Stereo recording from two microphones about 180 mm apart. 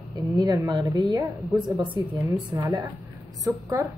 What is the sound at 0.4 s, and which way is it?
A woman's voice, 20° right (ahead or behind).